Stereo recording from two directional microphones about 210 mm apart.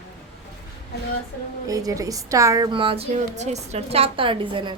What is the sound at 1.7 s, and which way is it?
A woman's voice, 15° right (ahead or behind).